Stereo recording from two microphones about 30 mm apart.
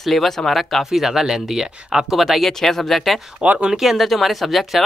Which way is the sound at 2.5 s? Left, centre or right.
Centre.